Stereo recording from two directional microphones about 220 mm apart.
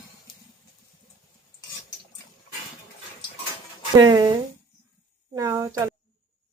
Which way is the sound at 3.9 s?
20° right (ahead or behind).